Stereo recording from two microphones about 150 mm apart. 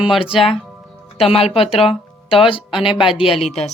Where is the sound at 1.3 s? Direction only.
40° left (ahead or behind).